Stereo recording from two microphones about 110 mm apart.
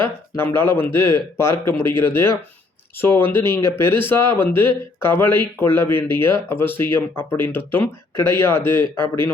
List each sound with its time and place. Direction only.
0.3 s speech: 20° left (ahead or behind)
8.8 s speech: 45° right (ahead or behind)